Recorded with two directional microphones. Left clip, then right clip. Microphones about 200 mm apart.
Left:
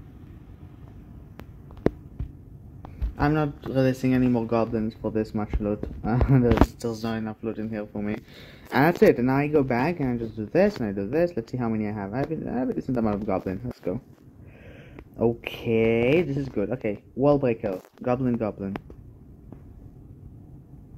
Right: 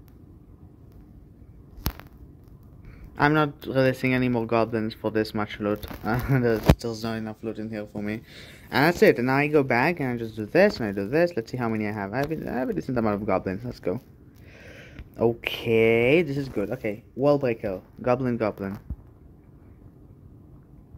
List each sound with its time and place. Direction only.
3.3 s speech: 5° right (ahead or behind)
7.0 s speech: 20° right (ahead or behind)
8.4 s speech: centre (ahead or behind)
14.7 s speech: 5° right (ahead or behind)